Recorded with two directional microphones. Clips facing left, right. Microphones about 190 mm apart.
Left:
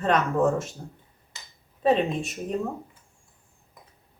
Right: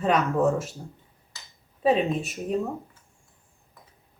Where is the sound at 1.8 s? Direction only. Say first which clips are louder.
Even; 5° right (ahead or behind).